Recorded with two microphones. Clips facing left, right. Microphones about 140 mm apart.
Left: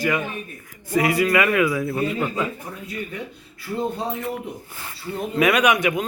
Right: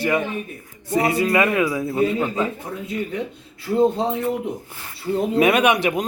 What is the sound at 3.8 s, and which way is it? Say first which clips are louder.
A man's voice: right 7 dB; 25° right (ahead or behind).